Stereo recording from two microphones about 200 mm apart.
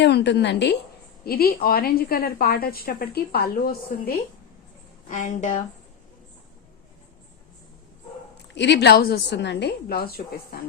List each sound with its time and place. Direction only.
0.0 s a woman's voice: 60° left (ahead or behind); by 5.6 s 35° left (ahead or behind)
8.5 s a woman's voice: 60° left (ahead or behind)